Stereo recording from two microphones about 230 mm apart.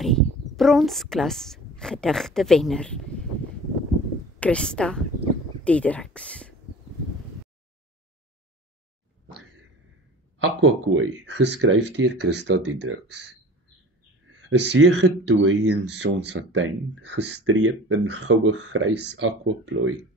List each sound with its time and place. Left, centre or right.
0.0 s a woman's voice: centre
4.4 s a woman's voice: centre
10.4 s speech: right
14.5 s speech: right